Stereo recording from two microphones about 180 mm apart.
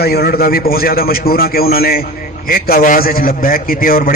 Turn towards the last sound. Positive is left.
turn(degrees=55)  # may be behind; listen again after turning